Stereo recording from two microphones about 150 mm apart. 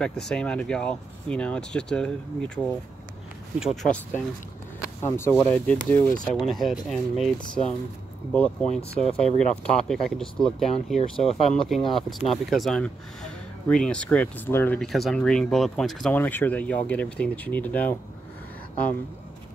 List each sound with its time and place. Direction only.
0.3 s speech: 5° left (ahead or behind)
5.1 s speech: 15° left (ahead or behind)
6.2 s speech: centre (ahead or behind)
8.9 s speech: 40° left (ahead or behind)
9.2 s speech: 5° left (ahead or behind)
14.9 s speech: centre (ahead or behind)